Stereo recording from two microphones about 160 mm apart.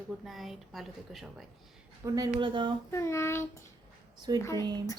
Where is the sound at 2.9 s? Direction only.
15° left (ahead or behind).